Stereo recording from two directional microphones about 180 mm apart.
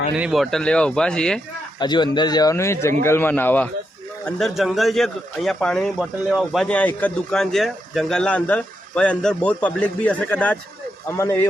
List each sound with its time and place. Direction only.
0.2 s a man's voice: centre (ahead or behind)
1.8 s a man's voice: 25° left (ahead or behind)